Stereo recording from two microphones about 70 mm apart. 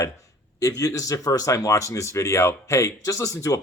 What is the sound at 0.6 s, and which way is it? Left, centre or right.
Speech, left.